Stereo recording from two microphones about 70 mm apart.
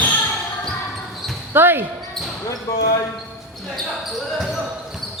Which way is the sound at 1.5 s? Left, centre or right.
Right.